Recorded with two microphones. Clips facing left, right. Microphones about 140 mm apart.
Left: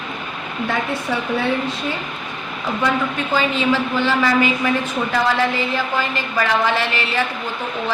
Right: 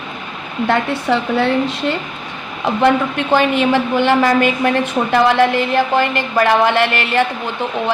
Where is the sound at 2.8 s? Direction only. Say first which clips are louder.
Right 7 dB; 65° right (ahead or behind).